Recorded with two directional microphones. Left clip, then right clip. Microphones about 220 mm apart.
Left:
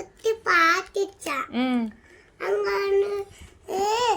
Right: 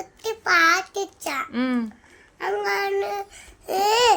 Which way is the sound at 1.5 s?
5° right (ahead or behind).